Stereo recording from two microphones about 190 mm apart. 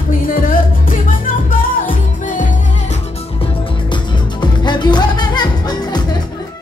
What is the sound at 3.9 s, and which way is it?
Music, 25° left (ahead or behind).